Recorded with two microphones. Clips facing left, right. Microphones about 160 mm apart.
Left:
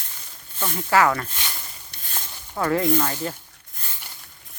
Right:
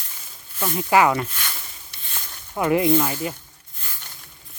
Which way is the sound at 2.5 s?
15° right (ahead or behind).